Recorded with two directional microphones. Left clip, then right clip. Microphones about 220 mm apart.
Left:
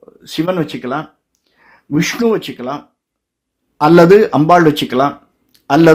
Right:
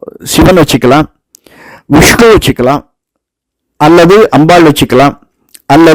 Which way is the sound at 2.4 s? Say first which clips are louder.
Right 15 dB; 55° right (ahead or behind).